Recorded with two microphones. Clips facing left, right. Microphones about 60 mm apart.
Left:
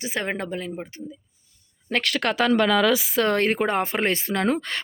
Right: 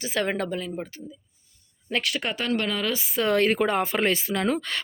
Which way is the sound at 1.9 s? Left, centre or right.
Left.